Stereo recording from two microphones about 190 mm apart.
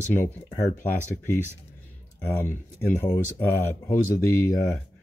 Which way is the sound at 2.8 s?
10° left (ahead or behind).